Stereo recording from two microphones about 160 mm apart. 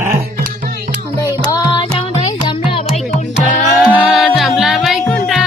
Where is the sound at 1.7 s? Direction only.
30° left (ahead or behind).